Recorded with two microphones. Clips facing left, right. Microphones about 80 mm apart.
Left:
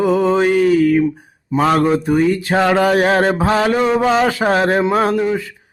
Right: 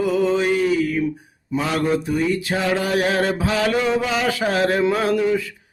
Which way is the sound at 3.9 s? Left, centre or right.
Left.